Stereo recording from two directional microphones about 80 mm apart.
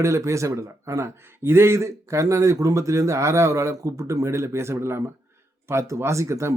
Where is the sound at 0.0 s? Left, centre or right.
Right.